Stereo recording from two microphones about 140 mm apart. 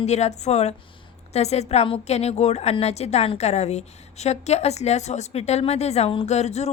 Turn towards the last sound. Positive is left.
turn(degrees=50)  # may be behind; listen again after turning